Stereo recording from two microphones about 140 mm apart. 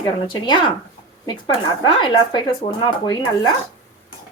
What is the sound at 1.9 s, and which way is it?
Speech, 35° left (ahead or behind).